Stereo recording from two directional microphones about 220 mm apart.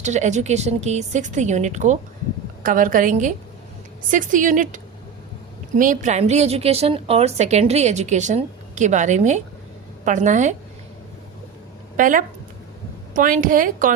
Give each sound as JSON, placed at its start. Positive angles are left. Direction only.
{"t": 0.0, "sound": "a woman's voice", "side_deg": -30}
{"t": 11.9, "sound": "a woman's voice", "side_deg": -35}